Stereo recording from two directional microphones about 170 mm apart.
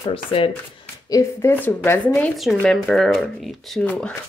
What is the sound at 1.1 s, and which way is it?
Speech, 15° left (ahead or behind).